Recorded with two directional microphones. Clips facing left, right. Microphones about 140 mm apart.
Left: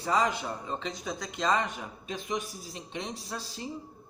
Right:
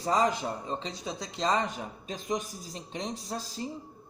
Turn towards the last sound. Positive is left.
turn(degrees=-40)  # may be behind; listen again after turning